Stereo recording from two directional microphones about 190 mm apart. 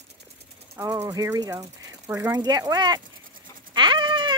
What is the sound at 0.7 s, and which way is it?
Speech, 15° right (ahead or behind).